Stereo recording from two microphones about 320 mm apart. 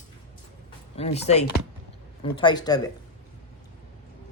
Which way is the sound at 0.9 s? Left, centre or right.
Centre.